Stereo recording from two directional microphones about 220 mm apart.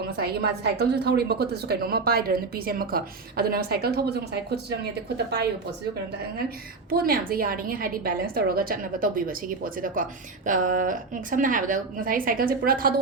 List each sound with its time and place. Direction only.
0.2 s a woman's voice: 45° right (ahead or behind)
6.9 s a woman's voice: 40° right (ahead or behind)